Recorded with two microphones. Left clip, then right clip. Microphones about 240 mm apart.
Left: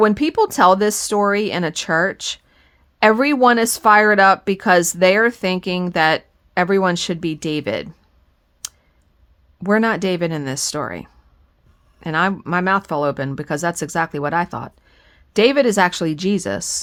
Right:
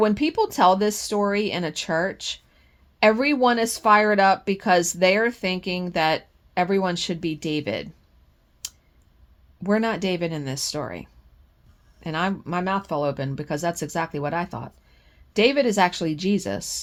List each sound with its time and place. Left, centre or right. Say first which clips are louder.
0.0 s speech: left 6 dB; left
8.6 s clicking: left 4 dB; left
9.6 s speech: left 6 dB; left